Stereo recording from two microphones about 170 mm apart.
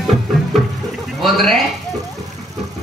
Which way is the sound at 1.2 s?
Centre (ahead or behind).